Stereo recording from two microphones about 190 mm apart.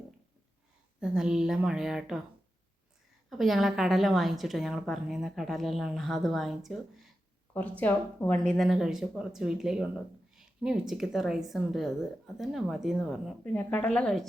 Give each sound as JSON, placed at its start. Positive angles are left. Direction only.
{"t": 0.9, "sound": "a woman's voice", "side_deg": -5}
{"t": 3.2, "sound": "a woman's voice", "side_deg": 0}